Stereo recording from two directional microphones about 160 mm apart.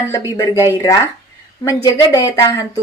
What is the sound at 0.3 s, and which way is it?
A woman's voice, 20° left (ahead or behind).